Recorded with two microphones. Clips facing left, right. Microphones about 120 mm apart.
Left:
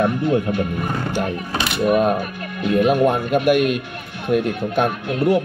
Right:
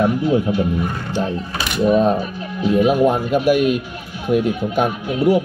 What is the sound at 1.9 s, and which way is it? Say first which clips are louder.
Speech: right 2 dB; 5° left (ahead or behind).